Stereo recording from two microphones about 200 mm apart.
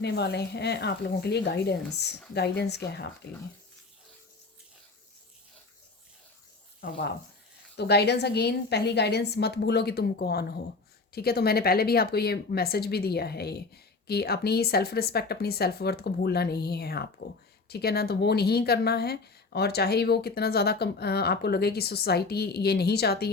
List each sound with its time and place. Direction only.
0.0 s speech: 55° left (ahead or behind)
6.8 s speech: 60° left (ahead or behind)